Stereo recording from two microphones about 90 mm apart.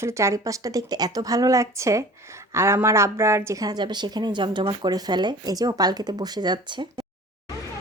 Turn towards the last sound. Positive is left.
turn(degrees=-60)  # may be behind; listen again after turning